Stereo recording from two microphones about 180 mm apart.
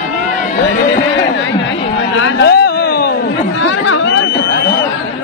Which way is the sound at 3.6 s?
90° left.